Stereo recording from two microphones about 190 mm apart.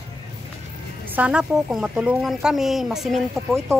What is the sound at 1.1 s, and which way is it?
Speech, 5° right (ahead or behind).